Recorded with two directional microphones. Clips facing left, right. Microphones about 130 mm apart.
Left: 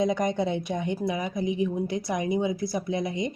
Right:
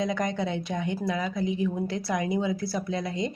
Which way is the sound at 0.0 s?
20° left (ahead or behind).